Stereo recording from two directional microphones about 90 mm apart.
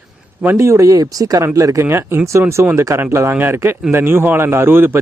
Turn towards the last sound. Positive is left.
turn(degrees=-25)  # may be behind; listen again after turning